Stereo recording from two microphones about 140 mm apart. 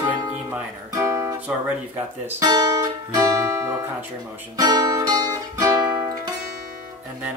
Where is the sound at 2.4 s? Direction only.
30° right (ahead or behind).